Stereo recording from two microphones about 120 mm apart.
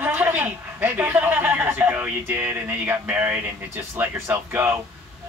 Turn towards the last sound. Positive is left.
turn(degrees=-15)  # may be behind; listen again after turning